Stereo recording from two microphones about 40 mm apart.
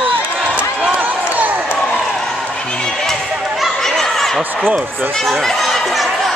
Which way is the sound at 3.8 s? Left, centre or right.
Centre.